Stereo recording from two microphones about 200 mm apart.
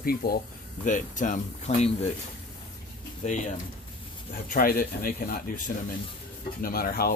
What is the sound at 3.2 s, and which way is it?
Speech, 35° left (ahead or behind).